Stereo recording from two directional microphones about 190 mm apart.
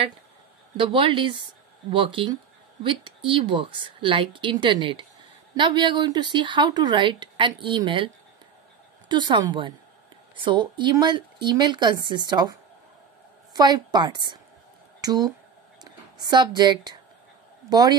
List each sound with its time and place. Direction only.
0.7 s speech: 25° right (ahead or behind)
9.1 s a woman's voice: 25° right (ahead or behind)